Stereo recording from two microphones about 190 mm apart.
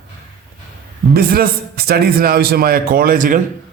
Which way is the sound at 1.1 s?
55° right (ahead or behind).